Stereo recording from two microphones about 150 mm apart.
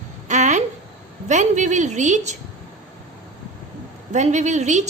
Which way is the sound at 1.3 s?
55° right (ahead or behind).